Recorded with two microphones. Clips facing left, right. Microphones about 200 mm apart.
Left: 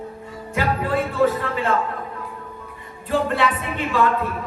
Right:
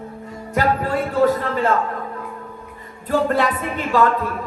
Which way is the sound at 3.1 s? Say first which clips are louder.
Right 2 dB; 45° right (ahead or behind).